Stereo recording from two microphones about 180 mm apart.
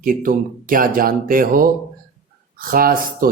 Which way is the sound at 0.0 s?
50° right (ahead or behind).